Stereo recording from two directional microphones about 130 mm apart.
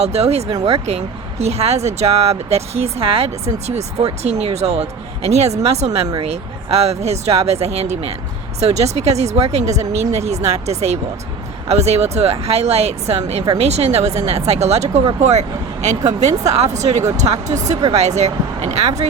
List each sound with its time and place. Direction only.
0.0 s speech: 55° right (ahead or behind)